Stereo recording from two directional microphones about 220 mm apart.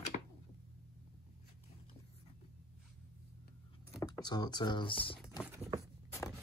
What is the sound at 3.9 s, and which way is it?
Speech, 15° left (ahead or behind).